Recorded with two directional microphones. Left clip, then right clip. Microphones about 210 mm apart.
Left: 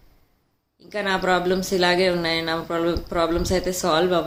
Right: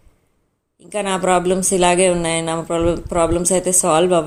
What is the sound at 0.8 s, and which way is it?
Speech, 25° right (ahead or behind).